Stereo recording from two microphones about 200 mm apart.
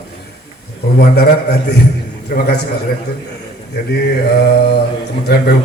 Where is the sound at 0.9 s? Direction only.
50° left (ahead or behind).